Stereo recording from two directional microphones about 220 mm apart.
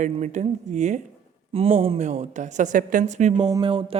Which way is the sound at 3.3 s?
20° right (ahead or behind).